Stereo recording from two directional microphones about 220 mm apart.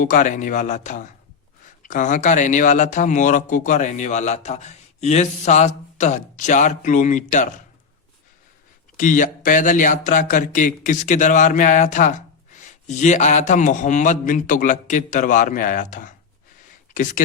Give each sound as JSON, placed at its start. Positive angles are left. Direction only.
{"t": 0.0, "sound": "speech", "side_deg": 35}
{"t": 9.0, "sound": "speech", "side_deg": 35}